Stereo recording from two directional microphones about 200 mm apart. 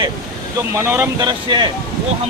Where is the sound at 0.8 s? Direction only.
10° right (ahead or behind).